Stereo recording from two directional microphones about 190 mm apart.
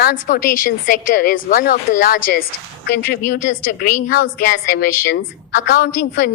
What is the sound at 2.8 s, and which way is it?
Speech, 60° left (ahead or behind).